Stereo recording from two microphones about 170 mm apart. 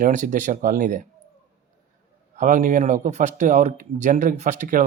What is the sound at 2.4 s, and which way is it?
Speech, 50° right (ahead or behind).